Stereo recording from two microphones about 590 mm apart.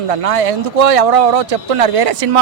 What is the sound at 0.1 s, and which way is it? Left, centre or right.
A man's voice, right.